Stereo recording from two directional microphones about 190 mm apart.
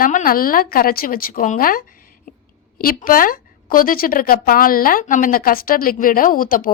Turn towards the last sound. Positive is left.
turn(degrees=50)  # may be behind; listen again after turning